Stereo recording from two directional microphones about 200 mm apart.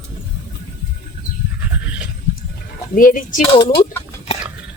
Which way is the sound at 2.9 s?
45° left (ahead or behind).